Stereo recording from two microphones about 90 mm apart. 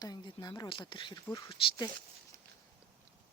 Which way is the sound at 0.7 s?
65° left (ahead or behind).